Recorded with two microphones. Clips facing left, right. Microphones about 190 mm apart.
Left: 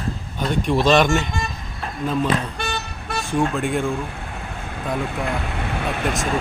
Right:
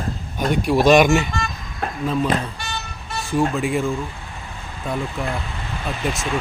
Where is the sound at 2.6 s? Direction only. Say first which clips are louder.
Left 4 dB; 60° left (ahead or behind).